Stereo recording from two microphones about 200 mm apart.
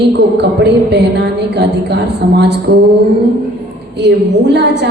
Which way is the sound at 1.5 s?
55° right (ahead or behind).